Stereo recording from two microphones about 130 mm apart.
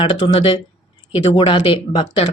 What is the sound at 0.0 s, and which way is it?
Speech, 45° left (ahead or behind).